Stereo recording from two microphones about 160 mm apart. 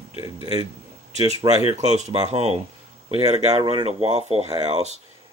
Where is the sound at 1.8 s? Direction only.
45° right (ahead or behind).